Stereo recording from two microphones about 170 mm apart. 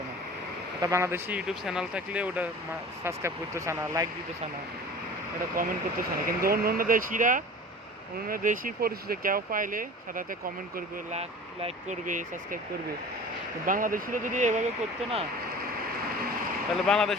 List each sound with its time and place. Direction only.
0.8 s speech: 20° right (ahead or behind)
5.5 s speech: 60° right (ahead or behind)
11.1 s speech: 40° right (ahead or behind)
13.7 s speech: 55° right (ahead or behind)
16.8 s speech: centre (ahead or behind)